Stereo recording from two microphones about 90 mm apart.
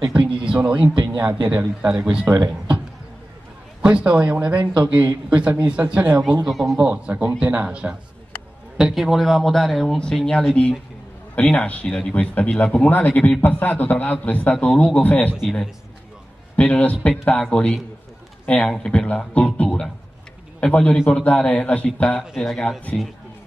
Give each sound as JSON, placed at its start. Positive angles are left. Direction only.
{"t": 0.5, "sound": "speech", "side_deg": -15}
{"t": 3.8, "sound": "speech", "side_deg": -10}
{"t": 6.4, "sound": "speech", "side_deg": -5}
{"t": 6.8, "sound": "speech", "side_deg": -15}
{"t": 11.3, "sound": "a man's voice", "side_deg": 15}
{"t": 15.0, "sound": "a man's voice", "side_deg": 15}
{"t": 16.5, "sound": "a man's voice", "side_deg": 15}
{"t": 22.2, "sound": "speech", "side_deg": 0}